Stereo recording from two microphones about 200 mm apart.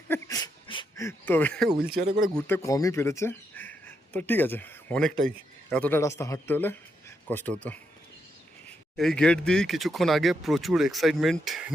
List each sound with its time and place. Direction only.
0.1 s a sound: 15° left (ahead or behind)
1.0 s speech: 10° left (ahead or behind)
2.6 s a man's voice: 15° left (ahead or behind)
9.0 s speech: 5° left (ahead or behind)